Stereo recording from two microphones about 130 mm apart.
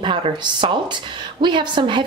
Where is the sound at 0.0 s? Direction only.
40° right (ahead or behind).